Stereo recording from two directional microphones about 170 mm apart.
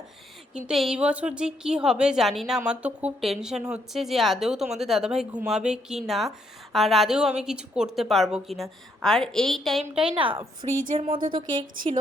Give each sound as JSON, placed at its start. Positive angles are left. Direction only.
{"t": 0.7, "sound": "speech", "side_deg": 0}
{"t": 10.9, "sound": "speech", "side_deg": -35}